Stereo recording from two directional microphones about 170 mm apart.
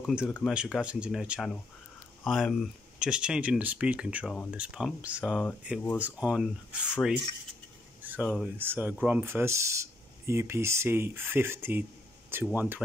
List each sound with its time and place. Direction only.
0.0 s speech: 5° right (ahead or behind)
8.2 s speech: centre (ahead or behind)
8.5 s speech: 10° right (ahead or behind)